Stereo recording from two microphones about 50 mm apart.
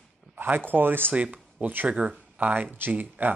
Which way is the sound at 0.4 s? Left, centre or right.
Right.